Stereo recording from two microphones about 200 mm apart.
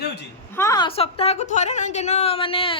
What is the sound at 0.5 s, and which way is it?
A woman's voice, 15° left (ahead or behind).